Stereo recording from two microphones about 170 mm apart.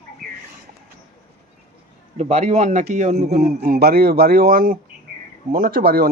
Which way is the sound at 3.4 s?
60° right (ahead or behind).